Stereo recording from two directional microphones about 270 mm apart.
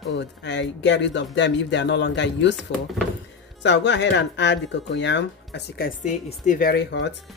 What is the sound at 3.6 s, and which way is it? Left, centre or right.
Speech, left.